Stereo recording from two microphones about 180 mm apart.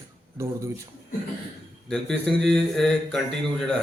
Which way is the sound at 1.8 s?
Centre (ahead or behind).